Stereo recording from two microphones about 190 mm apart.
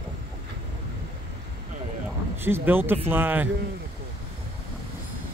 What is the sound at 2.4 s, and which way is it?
Speech, 10° right (ahead or behind).